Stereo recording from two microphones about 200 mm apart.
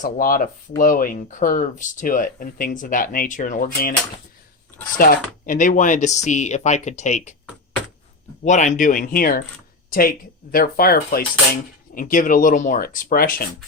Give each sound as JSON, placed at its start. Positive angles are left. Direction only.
{"t": 0.0, "sound": "speech", "side_deg": 45}
{"t": 4.9, "sound": "speech", "side_deg": 45}
{"t": 8.4, "sound": "speech", "side_deg": 35}